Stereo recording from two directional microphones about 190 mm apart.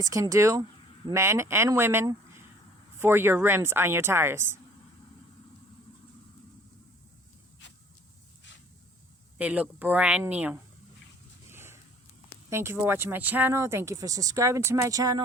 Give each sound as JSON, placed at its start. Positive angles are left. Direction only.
{"t": 0.0, "sound": "speech", "side_deg": -15}
{"t": 9.4, "sound": "speech", "side_deg": -10}
{"t": 11.4, "sound": "a sound", "side_deg": -15}
{"t": 12.5, "sound": "speech", "side_deg": -15}